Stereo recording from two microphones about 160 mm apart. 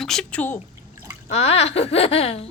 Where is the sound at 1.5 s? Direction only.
40° left (ahead or behind).